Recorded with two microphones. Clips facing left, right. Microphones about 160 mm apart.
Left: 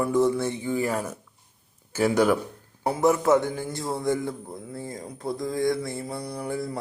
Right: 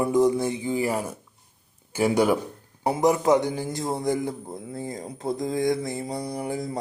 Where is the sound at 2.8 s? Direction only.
20° right (ahead or behind).